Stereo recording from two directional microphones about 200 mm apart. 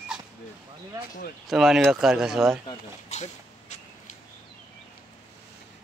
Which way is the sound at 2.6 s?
35° left (ahead or behind).